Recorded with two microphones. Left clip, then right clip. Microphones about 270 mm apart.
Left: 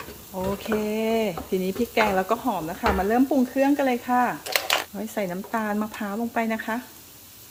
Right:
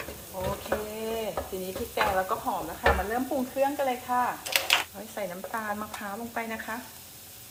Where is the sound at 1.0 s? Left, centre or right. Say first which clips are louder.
Left 7 dB; left.